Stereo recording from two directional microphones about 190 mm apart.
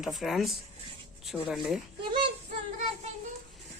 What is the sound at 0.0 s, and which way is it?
Speech, centre (ahead or behind).